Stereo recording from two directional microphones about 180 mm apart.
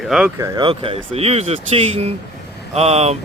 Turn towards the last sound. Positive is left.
turn(degrees=-35)  # may be behind; listen again after turning